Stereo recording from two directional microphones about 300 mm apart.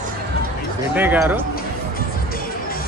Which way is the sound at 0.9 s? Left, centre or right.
Centre.